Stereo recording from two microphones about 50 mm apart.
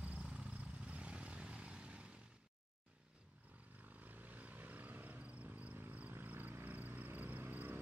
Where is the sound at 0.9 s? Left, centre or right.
Right.